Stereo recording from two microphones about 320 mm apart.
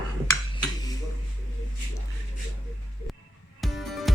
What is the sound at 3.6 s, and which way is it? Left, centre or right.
Music, centre.